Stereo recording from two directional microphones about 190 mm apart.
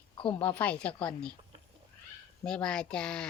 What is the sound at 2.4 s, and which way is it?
Speech, 5° left (ahead or behind).